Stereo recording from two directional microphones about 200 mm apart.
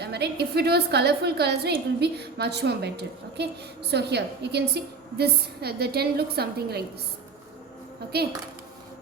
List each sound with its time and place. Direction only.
0.0 s a woman's voice: 55° right (ahead or behind)
8.1 s a woman's voice: 55° right (ahead or behind)